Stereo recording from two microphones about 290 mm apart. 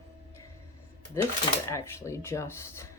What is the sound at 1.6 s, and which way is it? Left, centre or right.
A woman's voice, centre.